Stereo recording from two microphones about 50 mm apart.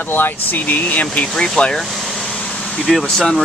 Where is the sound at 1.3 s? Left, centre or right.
Centre.